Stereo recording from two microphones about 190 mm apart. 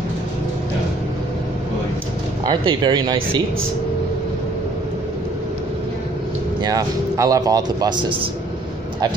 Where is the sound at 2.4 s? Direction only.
25° right (ahead or behind).